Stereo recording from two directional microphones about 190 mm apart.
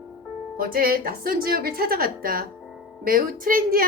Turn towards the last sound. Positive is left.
turn(degrees=-50)  # may be behind; listen again after turning